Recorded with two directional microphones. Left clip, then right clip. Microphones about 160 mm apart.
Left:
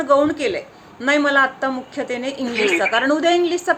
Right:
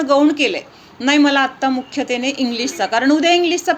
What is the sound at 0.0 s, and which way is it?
A woman's voice, 40° right (ahead or behind).